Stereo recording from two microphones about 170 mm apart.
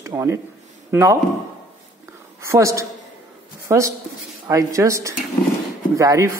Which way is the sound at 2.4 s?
15° right (ahead or behind).